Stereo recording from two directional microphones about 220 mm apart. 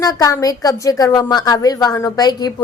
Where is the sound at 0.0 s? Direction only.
15° left (ahead or behind).